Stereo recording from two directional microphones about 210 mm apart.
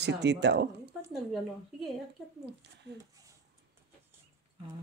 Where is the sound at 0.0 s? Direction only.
55° right (ahead or behind).